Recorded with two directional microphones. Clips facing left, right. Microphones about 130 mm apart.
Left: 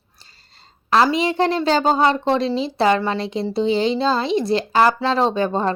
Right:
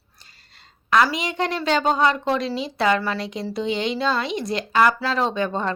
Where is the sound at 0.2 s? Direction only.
30° left (ahead or behind).